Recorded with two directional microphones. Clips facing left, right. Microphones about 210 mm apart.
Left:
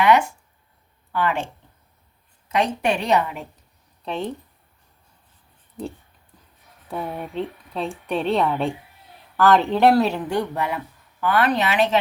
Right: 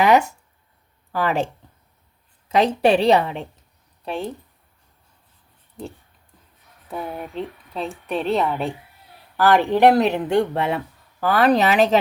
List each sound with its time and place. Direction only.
0.0 s a woman's voice: 40° right (ahead or behind)
2.6 s a woman's voice: 35° right (ahead or behind)
4.0 s speech: 10° right (ahead or behind)
6.9 s speech: centre (ahead or behind)
9.4 s speech: 15° right (ahead or behind)
11.2 s a woman's voice: 35° right (ahead or behind)